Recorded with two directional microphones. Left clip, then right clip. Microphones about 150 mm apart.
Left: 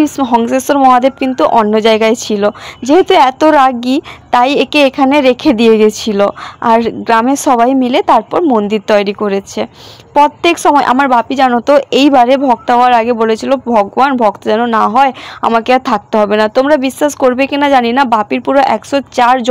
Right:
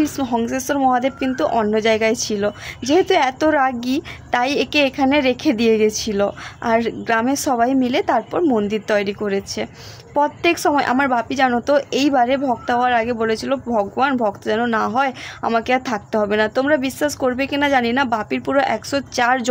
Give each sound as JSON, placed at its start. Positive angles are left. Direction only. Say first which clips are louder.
{"t": 0.3, "sound": "a woman's voice", "louder": "left 10 dB", "side_deg": 35}
{"t": 0.7, "sound": "a woman's voice", "louder": "left 10 dB", "side_deg": 25}
{"t": 11.6, "sound": "speech", "louder": "left 9 dB", "side_deg": 35}